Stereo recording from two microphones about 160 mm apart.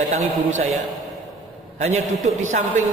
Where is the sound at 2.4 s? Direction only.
50° right (ahead or behind).